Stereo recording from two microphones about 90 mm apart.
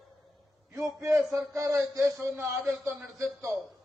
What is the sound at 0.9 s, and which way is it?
A man's voice, 30° right (ahead or behind).